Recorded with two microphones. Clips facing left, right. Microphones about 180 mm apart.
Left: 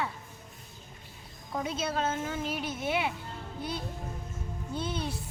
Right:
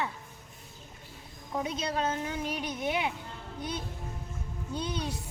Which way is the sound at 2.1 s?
15° right (ahead or behind).